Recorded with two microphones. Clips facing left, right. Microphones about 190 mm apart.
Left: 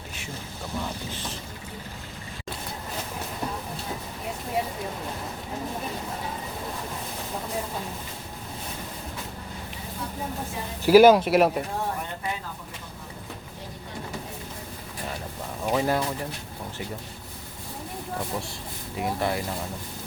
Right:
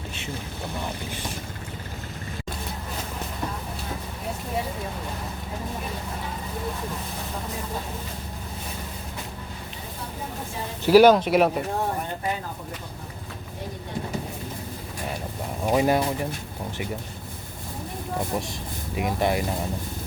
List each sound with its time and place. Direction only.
10.8 s speech: 5° left (ahead or behind)
15.6 s speech: 15° right (ahead or behind)
18.9 s speech: 15° right (ahead or behind)